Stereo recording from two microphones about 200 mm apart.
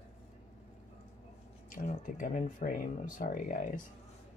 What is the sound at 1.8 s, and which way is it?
Speech, 40° left (ahead or behind).